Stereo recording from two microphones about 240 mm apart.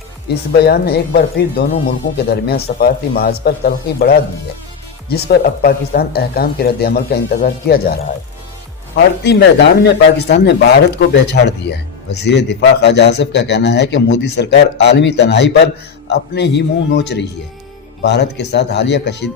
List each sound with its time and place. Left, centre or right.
0.3 s speech: left
9.2 s a man's voice: left